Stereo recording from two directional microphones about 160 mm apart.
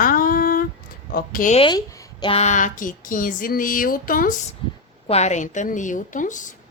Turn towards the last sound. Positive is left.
turn(degrees=55)  # may be behind; listen again after turning